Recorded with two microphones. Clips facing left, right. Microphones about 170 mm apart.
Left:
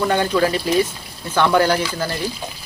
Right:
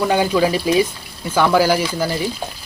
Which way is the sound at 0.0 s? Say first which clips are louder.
Right 2 dB; 10° right (ahead or behind).